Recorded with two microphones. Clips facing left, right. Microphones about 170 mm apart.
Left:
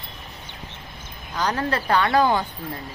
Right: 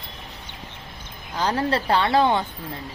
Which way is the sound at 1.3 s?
30° right (ahead or behind).